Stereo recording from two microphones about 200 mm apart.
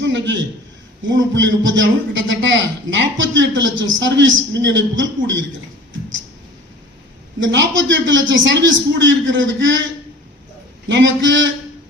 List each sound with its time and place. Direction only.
0.0 s a sound: 60° right (ahead or behind)
1.3 s a man's voice: 65° right (ahead or behind)
7.3 s a man's voice: 65° right (ahead or behind)
10.8 s a man's voice: 65° right (ahead or behind)